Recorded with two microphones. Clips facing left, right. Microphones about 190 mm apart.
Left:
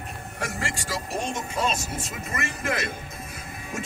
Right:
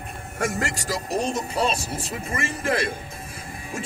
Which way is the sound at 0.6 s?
40° right (ahead or behind).